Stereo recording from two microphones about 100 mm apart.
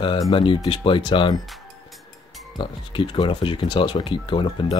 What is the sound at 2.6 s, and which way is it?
Speech, 55° left (ahead or behind).